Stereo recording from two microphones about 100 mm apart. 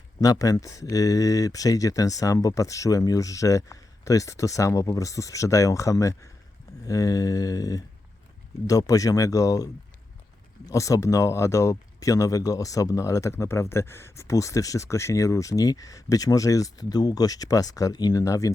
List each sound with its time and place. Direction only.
0.2 s speech: 35° left (ahead or behind)
10.7 s speech: 35° left (ahead or behind)